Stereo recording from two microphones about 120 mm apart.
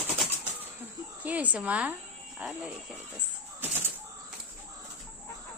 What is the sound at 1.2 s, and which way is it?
Speech, 10° right (ahead or behind).